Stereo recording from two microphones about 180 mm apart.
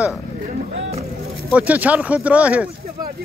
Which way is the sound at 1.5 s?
10° right (ahead or behind).